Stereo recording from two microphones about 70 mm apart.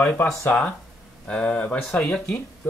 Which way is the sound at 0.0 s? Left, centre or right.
Left.